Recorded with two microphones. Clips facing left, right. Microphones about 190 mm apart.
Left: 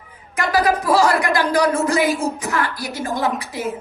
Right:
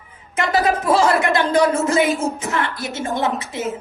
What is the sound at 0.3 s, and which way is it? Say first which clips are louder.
A woman's voice: even; 25° right (ahead or behind).